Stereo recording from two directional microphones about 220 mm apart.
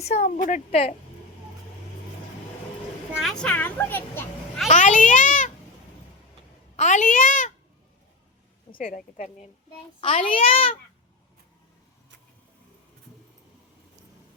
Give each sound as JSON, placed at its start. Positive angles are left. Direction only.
{"t": 0.0, "sound": "a woman's voice", "side_deg": 30}
{"t": 3.2, "sound": "speech", "side_deg": 0}
{"t": 4.7, "sound": "a child's voice", "side_deg": 35}
{"t": 6.7, "sound": "a woman's voice", "side_deg": 35}
{"t": 8.7, "sound": "a woman's voice", "side_deg": 40}
{"t": 10.0, "sound": "a child's voice", "side_deg": 25}